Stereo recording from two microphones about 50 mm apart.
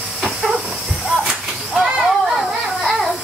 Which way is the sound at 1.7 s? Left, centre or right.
Centre.